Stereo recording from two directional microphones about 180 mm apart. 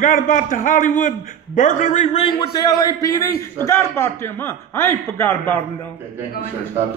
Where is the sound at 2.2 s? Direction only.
25° left (ahead or behind).